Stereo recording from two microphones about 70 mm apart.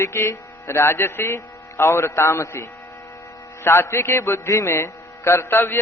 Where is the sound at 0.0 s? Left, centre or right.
Left.